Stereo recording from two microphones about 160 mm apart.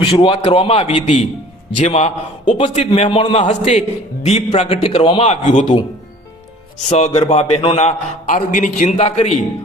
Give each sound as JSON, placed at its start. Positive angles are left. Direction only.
{"t": 0.0, "sound": "a man's voice", "side_deg": 35}
{"t": 3.4, "sound": "a man's voice", "side_deg": 45}
{"t": 6.8, "sound": "a man's voice", "side_deg": 45}